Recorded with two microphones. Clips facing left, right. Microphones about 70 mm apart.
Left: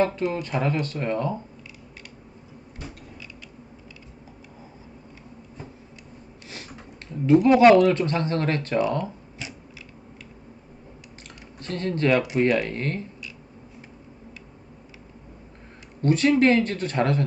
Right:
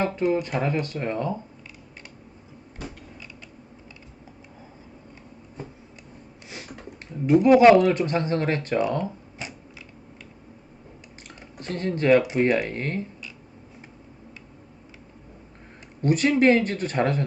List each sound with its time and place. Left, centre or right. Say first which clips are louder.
0.0 s speech: even; right
7.3 s speech: even; centre
11.6 s speech: even; right
16.0 s speech: left 1 dB; centre